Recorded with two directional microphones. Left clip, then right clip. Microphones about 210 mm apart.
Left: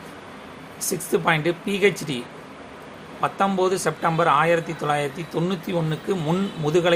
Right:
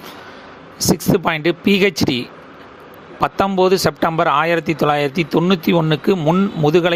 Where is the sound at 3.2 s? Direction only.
40° right (ahead or behind).